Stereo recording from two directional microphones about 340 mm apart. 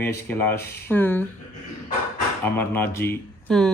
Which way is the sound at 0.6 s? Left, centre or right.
Left.